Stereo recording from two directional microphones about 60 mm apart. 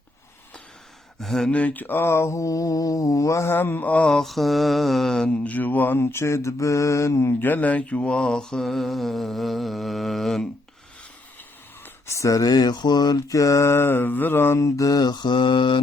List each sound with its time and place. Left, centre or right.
1.2 s speech: centre
1.5 s mantra: left
3.5 s mantra: left
3.8 s speech: left
4.1 s mantra: centre
5.3 s speech: left
6.0 s mantra: left
7.3 s mantra: left; by 10.4 s centre
12.0 s mantra: left
14.6 s mantra: left